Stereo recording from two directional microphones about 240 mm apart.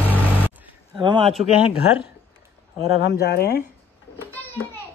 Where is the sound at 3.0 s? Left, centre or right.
Left.